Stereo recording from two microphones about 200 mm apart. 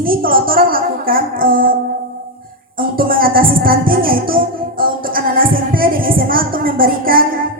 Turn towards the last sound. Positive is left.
turn(degrees=-45)  # may be behind; listen again after turning